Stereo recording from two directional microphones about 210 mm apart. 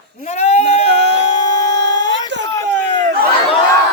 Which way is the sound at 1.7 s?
60° right (ahead or behind).